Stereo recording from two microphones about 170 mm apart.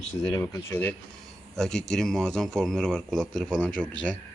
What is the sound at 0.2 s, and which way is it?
Speech, 15° left (ahead or behind).